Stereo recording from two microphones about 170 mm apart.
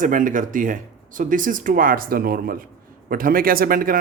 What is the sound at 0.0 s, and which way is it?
Speech, 50° right (ahead or behind).